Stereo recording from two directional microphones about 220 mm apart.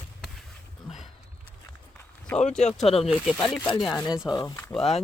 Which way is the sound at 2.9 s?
25° left (ahead or behind).